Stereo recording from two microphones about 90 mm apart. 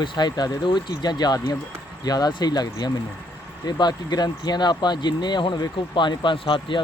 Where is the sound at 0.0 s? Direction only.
55° left (ahead or behind).